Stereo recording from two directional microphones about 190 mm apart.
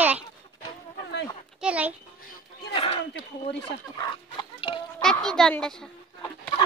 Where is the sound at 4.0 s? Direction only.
25° left (ahead or behind).